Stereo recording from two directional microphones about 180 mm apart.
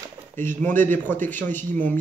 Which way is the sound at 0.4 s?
10° left (ahead or behind).